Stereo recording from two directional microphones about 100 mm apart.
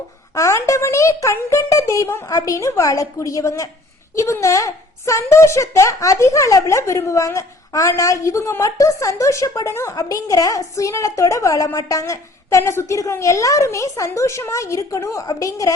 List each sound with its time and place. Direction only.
0.3 s a woman's voice: 30° left (ahead or behind)